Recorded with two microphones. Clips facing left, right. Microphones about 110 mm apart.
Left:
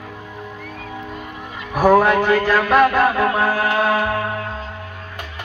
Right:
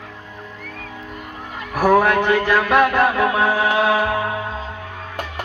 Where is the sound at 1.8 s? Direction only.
5° left (ahead or behind).